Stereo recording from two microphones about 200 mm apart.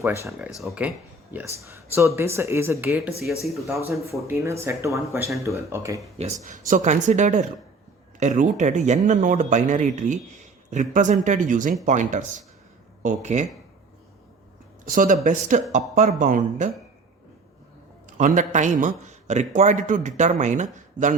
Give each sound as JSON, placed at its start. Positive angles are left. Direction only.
{"t": 0.0, "sound": "speech", "side_deg": -15}
{"t": 4.3, "sound": "speech", "side_deg": -15}
{"t": 6.2, "sound": "a man's voice", "side_deg": -30}
{"t": 14.8, "sound": "a man's voice", "side_deg": -40}
{"t": 18.2, "sound": "a man's voice", "side_deg": -40}